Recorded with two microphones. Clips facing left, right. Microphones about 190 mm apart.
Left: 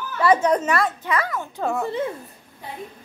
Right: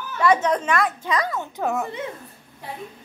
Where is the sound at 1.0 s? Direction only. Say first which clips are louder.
Even; 15° right (ahead or behind).